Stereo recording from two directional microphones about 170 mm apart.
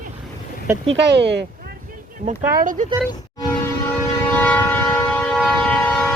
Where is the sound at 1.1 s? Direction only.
85° right.